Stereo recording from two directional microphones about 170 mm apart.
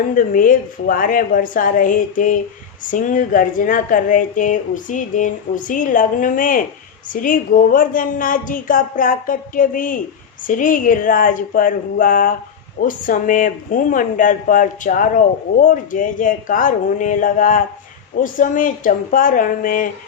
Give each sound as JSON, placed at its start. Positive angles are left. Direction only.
{"t": 0.1, "sound": "a woman's voice", "side_deg": 55}